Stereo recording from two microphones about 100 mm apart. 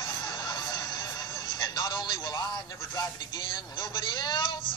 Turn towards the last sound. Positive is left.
turn(degrees=55)  # may be behind; listen again after turning